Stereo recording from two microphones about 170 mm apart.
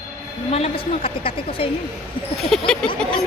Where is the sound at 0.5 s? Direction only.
35° left (ahead or behind).